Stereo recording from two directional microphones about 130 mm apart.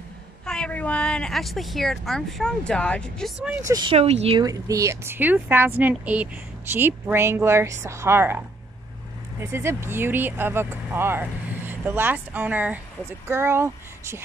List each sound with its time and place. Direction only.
0.5 s speech: 10° left (ahead or behind)
3.6 s speech: 30° right (ahead or behind)
3.9 s speech: 50° right (ahead or behind)
4.4 s a woman's voice: 25° right (ahead or behind)
9.4 s a woman's voice: 20° right (ahead or behind)